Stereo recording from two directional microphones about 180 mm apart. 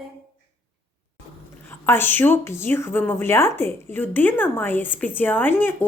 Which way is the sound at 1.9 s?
10° left (ahead or behind).